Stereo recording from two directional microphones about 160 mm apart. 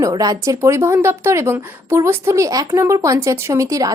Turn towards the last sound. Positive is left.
turn(degrees=-20)  # may be behind; listen again after turning